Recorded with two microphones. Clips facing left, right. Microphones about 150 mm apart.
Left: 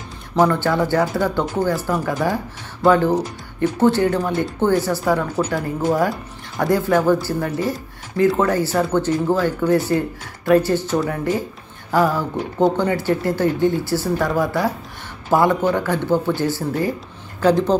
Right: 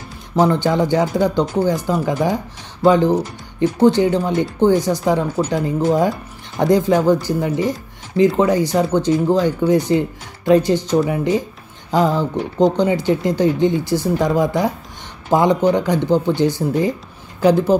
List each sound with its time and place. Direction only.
0.4 s speech: 15° right (ahead or behind)